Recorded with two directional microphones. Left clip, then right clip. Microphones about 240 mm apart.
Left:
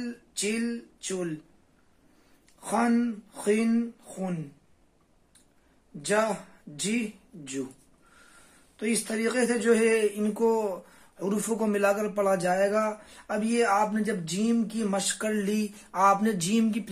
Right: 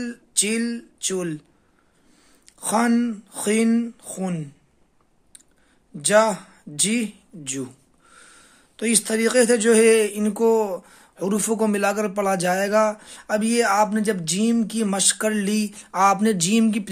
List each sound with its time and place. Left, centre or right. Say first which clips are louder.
0.0 s speech: right 6 dB; right
2.4 s speech: right 5 dB; right
5.9 s speech: right 9 dB; right
8.7 s speech: right 7 dB; right